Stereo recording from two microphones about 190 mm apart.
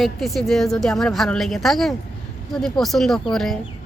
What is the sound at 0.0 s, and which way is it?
Speech, centre (ahead or behind).